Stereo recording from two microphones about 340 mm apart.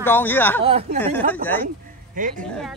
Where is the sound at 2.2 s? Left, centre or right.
Right.